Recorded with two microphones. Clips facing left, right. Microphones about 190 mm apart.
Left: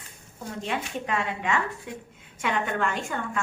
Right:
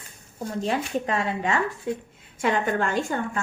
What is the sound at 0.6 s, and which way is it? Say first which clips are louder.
A woman's voice: right 5 dB; 35° right (ahead or behind).